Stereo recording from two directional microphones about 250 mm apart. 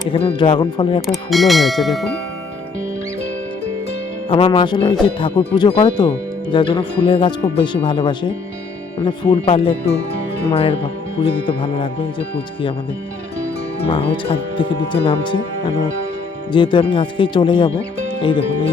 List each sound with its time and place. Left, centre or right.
0.1 s speech: left
1.0 s speech: centre
4.3 s speech: left
13.7 s speech: left